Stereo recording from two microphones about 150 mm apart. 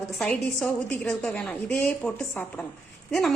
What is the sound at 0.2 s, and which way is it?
A woman's voice, 10° left (ahead or behind).